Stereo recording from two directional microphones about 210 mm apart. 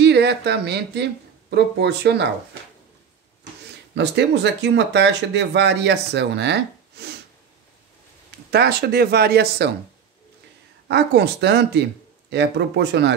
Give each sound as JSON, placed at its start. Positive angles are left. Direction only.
{"t": 0.0, "sound": "speech", "side_deg": -55}
{"t": 3.9, "sound": "speech", "side_deg": -55}
{"t": 8.5, "sound": "speech", "side_deg": -50}
{"t": 10.9, "sound": "speech", "side_deg": -55}